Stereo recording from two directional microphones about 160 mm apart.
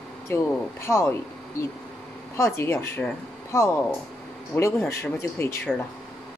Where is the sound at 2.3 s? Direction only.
15° left (ahead or behind).